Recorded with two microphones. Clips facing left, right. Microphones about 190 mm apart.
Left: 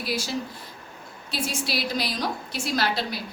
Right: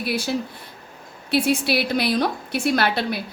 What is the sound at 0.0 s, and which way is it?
A woman's voice, 60° right (ahead or behind).